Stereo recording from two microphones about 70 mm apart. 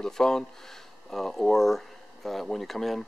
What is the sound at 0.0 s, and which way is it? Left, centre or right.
Speech, centre.